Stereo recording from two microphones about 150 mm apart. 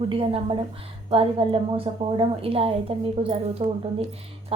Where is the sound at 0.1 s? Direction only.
40° right (ahead or behind).